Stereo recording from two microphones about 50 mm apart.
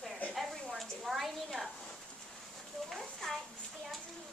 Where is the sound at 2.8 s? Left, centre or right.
Centre.